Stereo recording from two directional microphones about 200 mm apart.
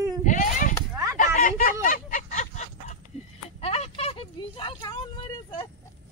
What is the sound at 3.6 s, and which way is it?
Vehicle, 30° left (ahead or behind).